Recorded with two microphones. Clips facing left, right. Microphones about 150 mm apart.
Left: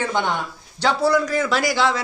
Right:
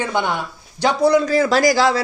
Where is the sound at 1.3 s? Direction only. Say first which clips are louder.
Right 6 dB; 35° right (ahead or behind).